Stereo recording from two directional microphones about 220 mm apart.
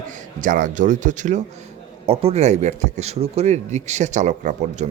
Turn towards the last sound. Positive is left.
turn(degrees=-35)  # may be behind; listen again after turning